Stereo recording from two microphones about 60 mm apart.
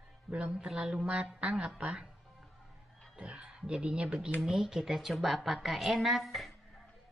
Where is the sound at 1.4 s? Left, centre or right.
Centre.